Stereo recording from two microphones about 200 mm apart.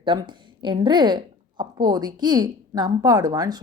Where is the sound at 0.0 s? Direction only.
25° right (ahead or behind).